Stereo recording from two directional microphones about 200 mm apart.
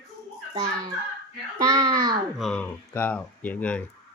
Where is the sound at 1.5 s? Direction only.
20° right (ahead or behind).